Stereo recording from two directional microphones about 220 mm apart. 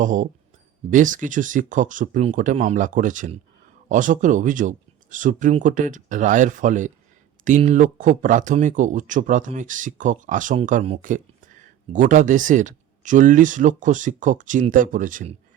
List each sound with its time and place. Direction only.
0.0 s speech: 35° right (ahead or behind)